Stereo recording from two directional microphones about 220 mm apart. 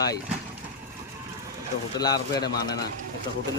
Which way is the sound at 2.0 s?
20° left (ahead or behind).